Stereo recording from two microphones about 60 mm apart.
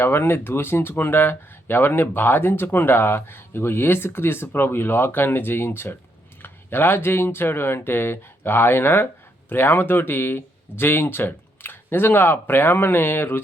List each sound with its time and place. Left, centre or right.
0.0 s speech: left